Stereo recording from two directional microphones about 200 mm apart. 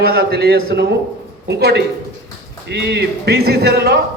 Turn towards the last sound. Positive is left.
turn(degrees=-55)  # may be behind; listen again after turning